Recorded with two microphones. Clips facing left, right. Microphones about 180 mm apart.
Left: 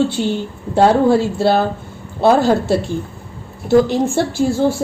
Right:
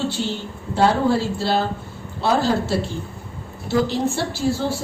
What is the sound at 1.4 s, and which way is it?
Speech, 55° left (ahead or behind).